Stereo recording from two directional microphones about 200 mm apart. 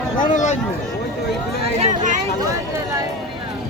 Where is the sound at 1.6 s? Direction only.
30° right (ahead or behind).